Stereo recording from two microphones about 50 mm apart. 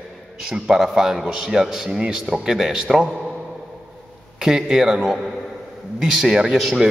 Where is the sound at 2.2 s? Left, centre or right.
Centre.